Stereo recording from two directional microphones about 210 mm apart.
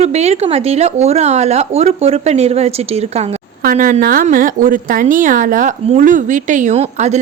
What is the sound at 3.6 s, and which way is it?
A woman's voice, 40° right (ahead or behind).